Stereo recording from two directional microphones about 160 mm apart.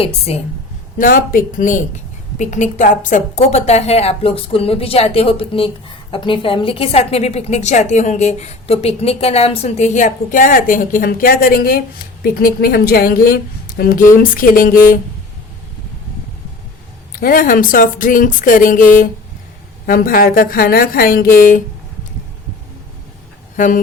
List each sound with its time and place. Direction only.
0.3 s a woman's voice: 40° left (ahead or behind)
0.9 s a woman's voice: 60° left (ahead or behind)
17.1 s speech: 65° left (ahead or behind)
19.9 s speech: 65° left (ahead or behind)
23.6 s speech: 55° left (ahead or behind)